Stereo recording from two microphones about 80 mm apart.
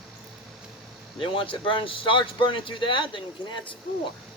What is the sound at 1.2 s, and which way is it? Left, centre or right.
Speech, left.